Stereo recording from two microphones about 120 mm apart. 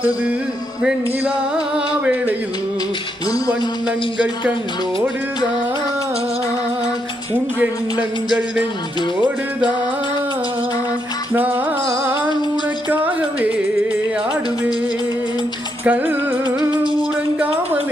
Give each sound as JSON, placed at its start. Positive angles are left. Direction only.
{"t": 0.8, "sound": "music", "side_deg": -10}
{"t": 3.2, "sound": "music", "side_deg": 30}
{"t": 3.8, "sound": "music", "side_deg": -10}
{"t": 7.6, "sound": "music", "side_deg": -10}
{"t": 11.3, "sound": "music", "side_deg": -15}
{"t": 12.9, "sound": "music", "side_deg": -15}
{"t": 15.8, "sound": "music", "side_deg": -15}